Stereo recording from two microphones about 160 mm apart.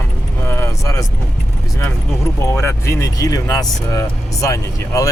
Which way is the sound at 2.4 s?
15° left (ahead or behind).